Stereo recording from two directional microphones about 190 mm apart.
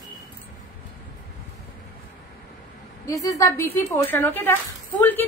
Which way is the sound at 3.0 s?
15° left (ahead or behind).